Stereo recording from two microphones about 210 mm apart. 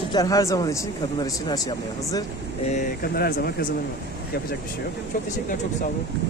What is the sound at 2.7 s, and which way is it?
Speech, 45° left (ahead or behind).